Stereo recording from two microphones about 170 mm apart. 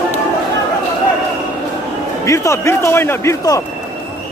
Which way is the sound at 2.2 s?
20° left (ahead or behind).